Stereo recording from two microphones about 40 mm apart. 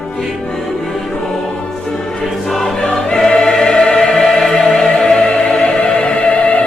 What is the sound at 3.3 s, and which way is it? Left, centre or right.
Music, centre.